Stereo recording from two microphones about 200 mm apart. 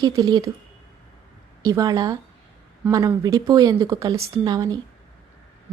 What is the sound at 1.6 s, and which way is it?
A woman's voice, 20° right (ahead or behind).